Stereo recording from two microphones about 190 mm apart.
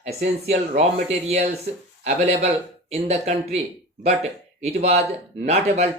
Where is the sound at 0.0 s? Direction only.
35° right (ahead or behind).